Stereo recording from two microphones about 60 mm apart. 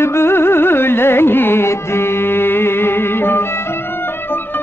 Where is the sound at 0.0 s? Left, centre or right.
Left.